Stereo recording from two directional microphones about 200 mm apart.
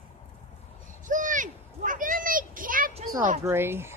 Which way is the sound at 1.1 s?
40° right (ahead or behind).